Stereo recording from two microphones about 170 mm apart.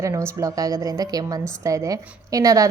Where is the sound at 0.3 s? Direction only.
20° right (ahead or behind).